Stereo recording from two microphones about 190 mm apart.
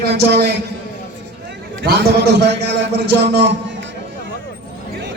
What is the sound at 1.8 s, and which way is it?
Speech, 60° right (ahead or behind).